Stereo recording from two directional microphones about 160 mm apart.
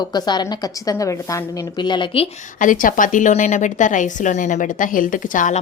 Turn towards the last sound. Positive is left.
turn(degrees=55)  # may be behind; listen again after turning